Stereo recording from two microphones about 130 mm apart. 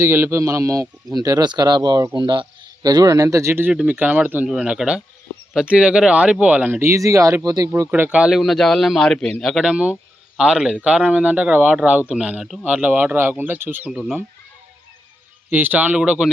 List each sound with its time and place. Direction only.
0.0 s speech: 20° right (ahead or behind)
7.7 s a man's voice: 15° right (ahead or behind)
13.9 s a man's voice: 5° right (ahead or behind)
15.4 s speech: 15° right (ahead or behind)